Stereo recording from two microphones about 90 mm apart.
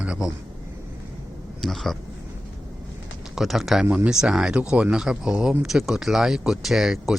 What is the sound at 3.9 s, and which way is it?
Speech, 15° right (ahead or behind).